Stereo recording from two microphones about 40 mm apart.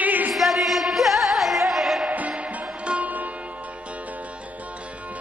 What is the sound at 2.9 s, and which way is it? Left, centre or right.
Sitar, right.